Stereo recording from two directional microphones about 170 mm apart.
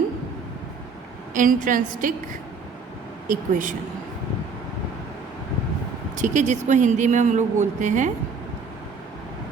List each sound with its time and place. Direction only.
1.3 s speech: 50° right (ahead or behind)
3.2 s speech: 50° right (ahead or behind)
6.1 s speech: 45° right (ahead or behind)